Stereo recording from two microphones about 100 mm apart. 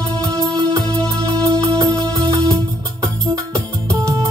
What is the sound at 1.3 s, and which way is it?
Music, 35° right (ahead or behind).